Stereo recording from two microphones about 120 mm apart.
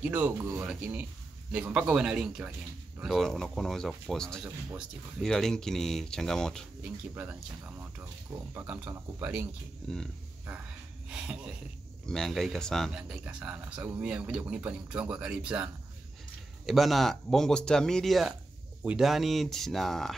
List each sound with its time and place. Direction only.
0.0 s speech: 10° right (ahead or behind); by 6.6 s 5° left (ahead or behind)
6.8 s speech: 10° right (ahead or behind)
8.5 s speech: 15° right (ahead or behind)
9.8 s speech: 5° left (ahead or behind)
11.1 s speech: 5° right (ahead or behind)
12.9 s speech: 10° right (ahead or behind)
16.6 s speech: centre (ahead or behind)